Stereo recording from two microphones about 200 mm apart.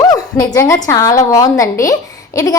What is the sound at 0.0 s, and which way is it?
A woman's voice, 20° left (ahead or behind).